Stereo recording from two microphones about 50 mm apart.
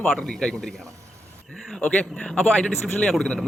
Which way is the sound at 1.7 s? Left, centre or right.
Centre.